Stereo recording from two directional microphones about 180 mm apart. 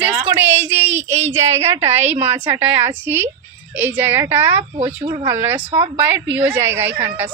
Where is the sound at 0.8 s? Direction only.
40° right (ahead or behind).